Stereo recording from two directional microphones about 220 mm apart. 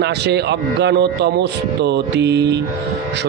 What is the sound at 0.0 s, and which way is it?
A man's voice, 50° right (ahead or behind).